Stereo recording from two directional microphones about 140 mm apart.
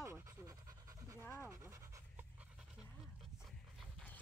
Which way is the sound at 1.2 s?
20° left (ahead or behind).